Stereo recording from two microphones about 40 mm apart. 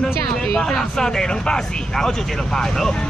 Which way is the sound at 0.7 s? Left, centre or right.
Centre.